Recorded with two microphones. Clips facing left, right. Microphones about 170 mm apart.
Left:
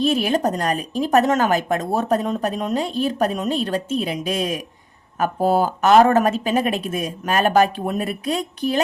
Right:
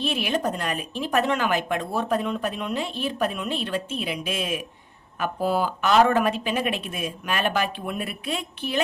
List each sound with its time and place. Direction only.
0.0 s a woman's voice: 40° left (ahead or behind)